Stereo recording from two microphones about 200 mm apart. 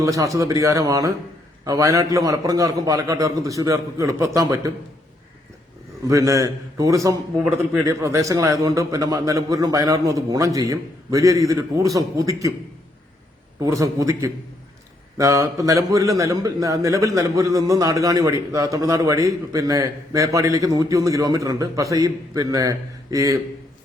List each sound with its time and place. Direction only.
0.0 s a man's voice: 15° right (ahead or behind)
6.1 s a man's voice: 15° right (ahead or behind)
13.6 s a man's voice: 15° right (ahead or behind)